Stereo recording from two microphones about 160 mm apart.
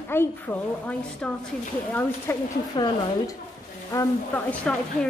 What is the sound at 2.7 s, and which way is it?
Speech, 25° left (ahead or behind).